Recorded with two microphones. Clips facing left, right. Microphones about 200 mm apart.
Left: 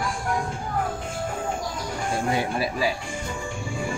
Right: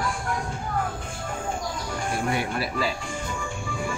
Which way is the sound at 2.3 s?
20° left (ahead or behind).